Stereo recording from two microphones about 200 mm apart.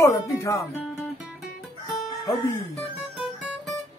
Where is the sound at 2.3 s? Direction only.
15° left (ahead or behind).